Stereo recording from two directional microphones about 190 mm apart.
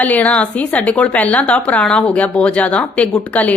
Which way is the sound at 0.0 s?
10° left (ahead or behind).